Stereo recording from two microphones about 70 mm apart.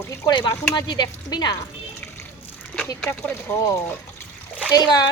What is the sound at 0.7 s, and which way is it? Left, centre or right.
Speech, left.